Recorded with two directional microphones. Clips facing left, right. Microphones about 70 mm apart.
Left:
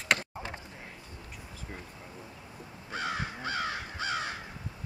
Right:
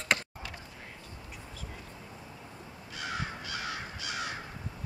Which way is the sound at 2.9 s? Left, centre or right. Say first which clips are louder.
Left 3 dB; left.